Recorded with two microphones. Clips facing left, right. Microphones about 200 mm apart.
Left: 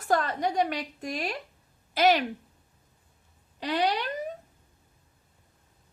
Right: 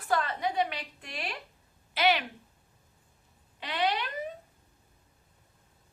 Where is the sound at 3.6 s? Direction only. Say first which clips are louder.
Left 4 dB; 40° left (ahead or behind).